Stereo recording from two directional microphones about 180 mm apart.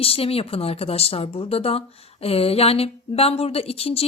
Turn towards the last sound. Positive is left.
turn(degrees=35)  # may be behind; listen again after turning